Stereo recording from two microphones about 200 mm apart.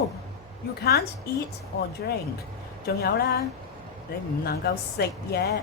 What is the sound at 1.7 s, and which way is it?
A woman's voice, 55° left (ahead or behind).